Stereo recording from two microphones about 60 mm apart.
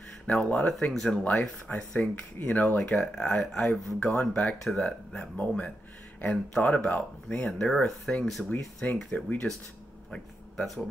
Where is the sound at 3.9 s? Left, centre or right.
Centre.